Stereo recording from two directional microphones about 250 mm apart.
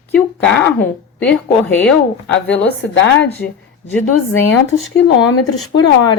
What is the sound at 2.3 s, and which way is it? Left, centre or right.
Speech, left.